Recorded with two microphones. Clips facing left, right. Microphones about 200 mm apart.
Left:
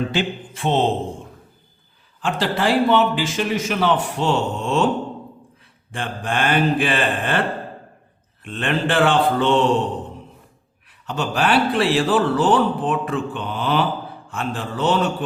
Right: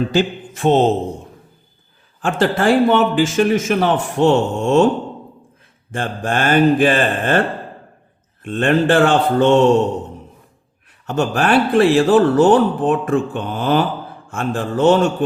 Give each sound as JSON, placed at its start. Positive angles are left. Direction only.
{"t": 0.1, "sound": "a man's voice", "side_deg": -45}
{"t": 2.2, "sound": "a man's voice", "side_deg": -50}
{"t": 5.9, "sound": "a man's voice", "side_deg": -45}
{"t": 8.4, "sound": "a man's voice", "side_deg": -45}
{"t": 11.0, "sound": "a man's voice", "side_deg": -45}